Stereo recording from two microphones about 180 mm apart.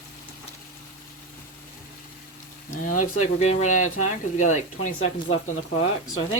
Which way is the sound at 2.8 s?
45° left (ahead or behind).